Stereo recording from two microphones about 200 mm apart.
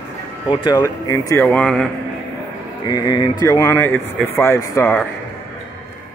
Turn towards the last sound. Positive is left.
turn(degrees=10)  # may be behind; listen again after turning